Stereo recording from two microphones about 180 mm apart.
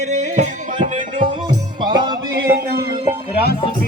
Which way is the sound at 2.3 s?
60° right (ahead or behind).